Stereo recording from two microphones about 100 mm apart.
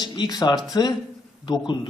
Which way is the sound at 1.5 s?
50° left (ahead or behind).